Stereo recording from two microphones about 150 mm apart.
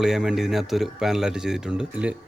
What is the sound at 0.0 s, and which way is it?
A man's voice, 5° right (ahead or behind).